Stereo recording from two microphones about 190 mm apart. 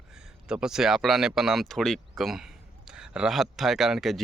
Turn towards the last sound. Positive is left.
turn(degrees=0)  # may be behind; listen again after turning